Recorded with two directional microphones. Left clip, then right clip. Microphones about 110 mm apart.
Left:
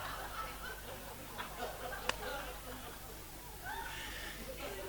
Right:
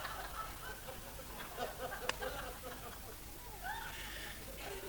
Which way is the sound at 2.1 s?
30° left (ahead or behind).